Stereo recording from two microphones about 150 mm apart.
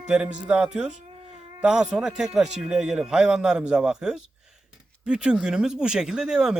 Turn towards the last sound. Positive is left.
turn(degrees=-5)  # may be behind; listen again after turning